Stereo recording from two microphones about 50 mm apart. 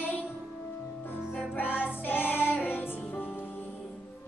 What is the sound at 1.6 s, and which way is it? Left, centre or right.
Music, left.